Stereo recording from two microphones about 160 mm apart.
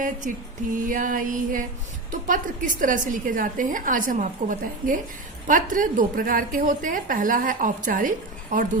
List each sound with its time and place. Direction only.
0.2 s a woman's voice: 55° right (ahead or behind)